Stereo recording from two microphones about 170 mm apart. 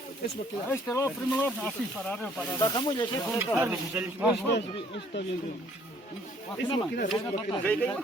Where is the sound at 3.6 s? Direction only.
10° right (ahead or behind).